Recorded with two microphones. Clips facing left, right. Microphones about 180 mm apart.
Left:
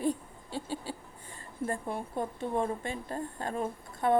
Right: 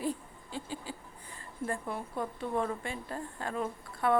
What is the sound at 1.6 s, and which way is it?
A woman's voice, 25° left (ahead or behind).